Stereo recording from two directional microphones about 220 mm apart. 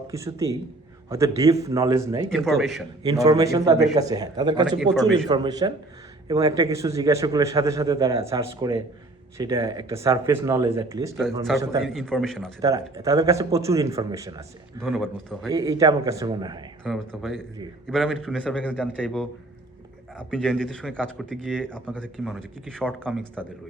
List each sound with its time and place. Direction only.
0.1 s a man's voice: 15° right (ahead or behind)
2.3 s speech: centre (ahead or behind)
3.0 s a man's voice: 15° right (ahead or behind)
11.9 s speech: centre (ahead or behind)
12.6 s a man's voice: 15° right (ahead or behind)
14.8 s speech: centre (ahead or behind)
15.4 s a man's voice: 15° right (ahead or behind)
16.8 s speech: centre (ahead or behind)
23.0 s a man's voice: 10° right (ahead or behind)